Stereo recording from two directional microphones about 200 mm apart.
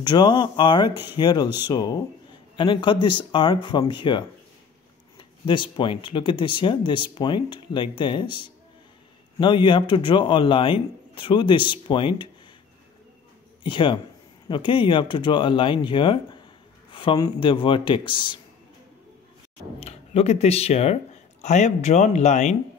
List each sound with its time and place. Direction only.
0.0 s speech: 20° left (ahead or behind)
13.7 s speech: 25° left (ahead or behind)
19.8 s speech: 30° left (ahead or behind)